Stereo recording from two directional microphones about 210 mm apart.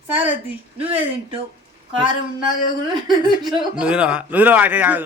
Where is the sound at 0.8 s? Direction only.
25° right (ahead or behind).